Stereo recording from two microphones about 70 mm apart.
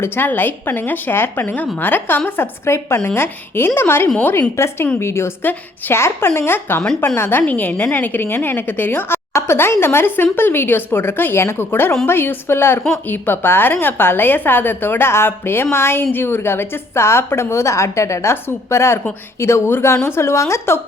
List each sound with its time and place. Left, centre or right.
0.0 s a woman's voice: left
4.5 s a woman's voice: left